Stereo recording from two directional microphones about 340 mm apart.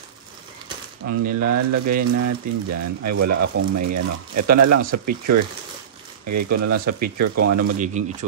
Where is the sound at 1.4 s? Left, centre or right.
Right.